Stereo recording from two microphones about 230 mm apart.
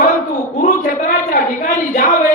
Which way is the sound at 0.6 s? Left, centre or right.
Left.